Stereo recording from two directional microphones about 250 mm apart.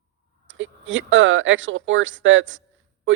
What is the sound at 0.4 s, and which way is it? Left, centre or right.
A man's voice, right.